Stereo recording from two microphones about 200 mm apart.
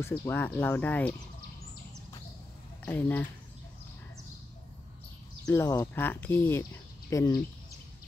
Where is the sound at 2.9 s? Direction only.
10° left (ahead or behind).